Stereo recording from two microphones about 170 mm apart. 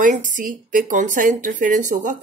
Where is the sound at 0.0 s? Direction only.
50° right (ahead or behind).